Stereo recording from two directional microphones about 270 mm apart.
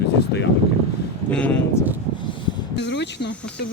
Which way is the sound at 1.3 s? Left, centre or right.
Centre.